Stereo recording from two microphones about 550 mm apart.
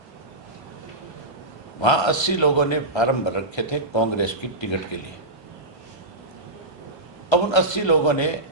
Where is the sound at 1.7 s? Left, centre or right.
Left.